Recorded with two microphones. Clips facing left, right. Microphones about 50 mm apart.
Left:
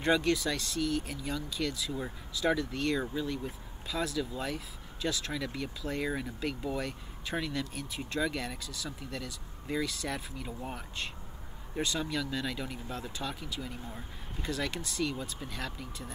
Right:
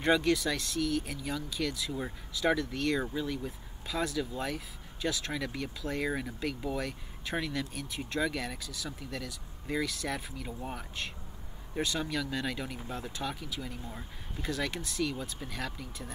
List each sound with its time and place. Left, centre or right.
0.0 s speech: centre